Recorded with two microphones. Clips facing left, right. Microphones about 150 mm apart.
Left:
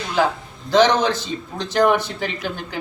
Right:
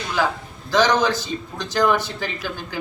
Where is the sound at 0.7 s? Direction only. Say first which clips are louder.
Left 2 dB; 20° left (ahead or behind).